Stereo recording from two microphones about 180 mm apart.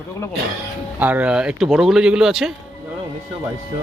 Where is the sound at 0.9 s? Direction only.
10° right (ahead or behind).